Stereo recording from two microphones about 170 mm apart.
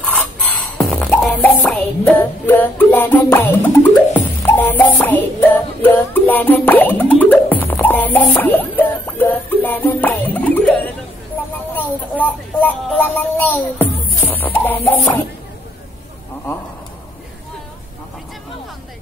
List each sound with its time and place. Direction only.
0.0 s music: 5° left (ahead or behind)
11.7 s speech: 10° left (ahead or behind)